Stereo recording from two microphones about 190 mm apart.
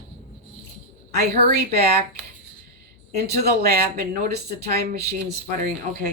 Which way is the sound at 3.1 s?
55° right (ahead or behind).